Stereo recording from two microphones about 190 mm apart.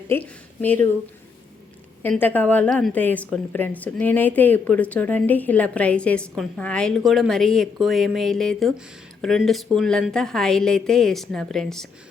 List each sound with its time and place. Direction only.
0.1 s a woman's voice: 10° left (ahead or behind)
2.0 s a woman's voice: 10° left (ahead or behind)